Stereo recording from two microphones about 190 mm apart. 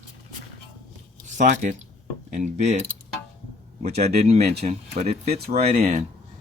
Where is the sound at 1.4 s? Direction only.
40° right (ahead or behind).